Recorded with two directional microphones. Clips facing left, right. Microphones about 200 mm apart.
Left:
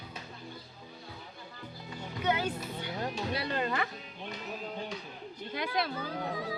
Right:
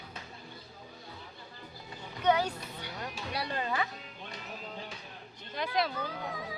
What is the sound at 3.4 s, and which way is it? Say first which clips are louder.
Speech: right 2 dB; 60° left (ahead or behind).